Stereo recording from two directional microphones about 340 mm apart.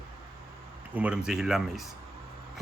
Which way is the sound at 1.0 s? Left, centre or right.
Centre.